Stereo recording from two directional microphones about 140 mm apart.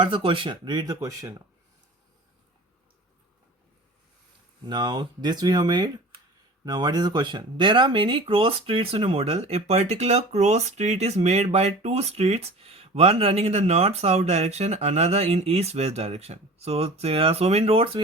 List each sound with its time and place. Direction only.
0.0 s speech: 35° right (ahead or behind)
4.6 s speech: 30° right (ahead or behind)